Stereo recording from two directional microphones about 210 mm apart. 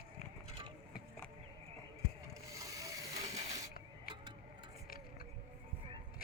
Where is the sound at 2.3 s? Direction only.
15° right (ahead or behind).